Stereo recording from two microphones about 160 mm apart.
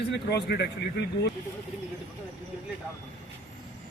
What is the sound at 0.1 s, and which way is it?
Speech, 90° left.